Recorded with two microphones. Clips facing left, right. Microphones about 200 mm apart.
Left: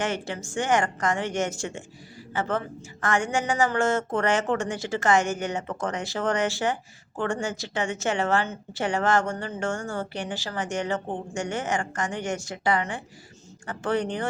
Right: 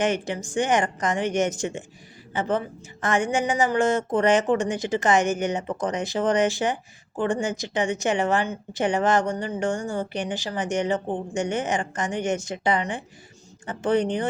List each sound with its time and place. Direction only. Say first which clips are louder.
0.0 s a woman's voice: right 4 dB; 15° right (ahead or behind)